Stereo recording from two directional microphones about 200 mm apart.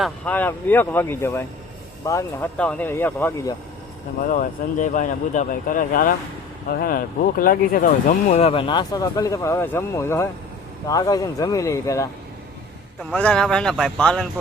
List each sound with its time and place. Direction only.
0.0 s speech: 10° left (ahead or behind)
4.2 s speech: 40° left (ahead or behind); by 14.3 s 5° left (ahead or behind)